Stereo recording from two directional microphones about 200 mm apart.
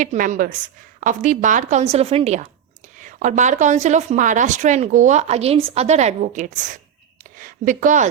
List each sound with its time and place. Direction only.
0.0 s a woman's voice: 40° right (ahead or behind)